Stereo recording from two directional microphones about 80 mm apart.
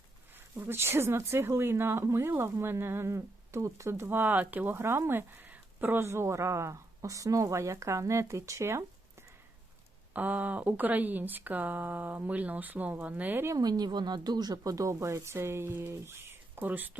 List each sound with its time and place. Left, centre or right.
0.3 s speech: right
10.1 s speech: right
13.6 s speech: right